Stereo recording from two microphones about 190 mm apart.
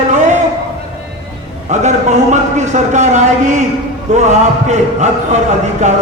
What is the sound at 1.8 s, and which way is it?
A man's voice, 40° right (ahead or behind).